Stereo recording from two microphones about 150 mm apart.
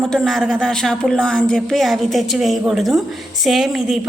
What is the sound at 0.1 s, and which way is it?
A woman's voice, 5° left (ahead or behind).